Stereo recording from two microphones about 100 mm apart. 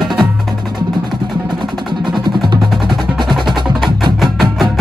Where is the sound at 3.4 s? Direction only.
50° right (ahead or behind).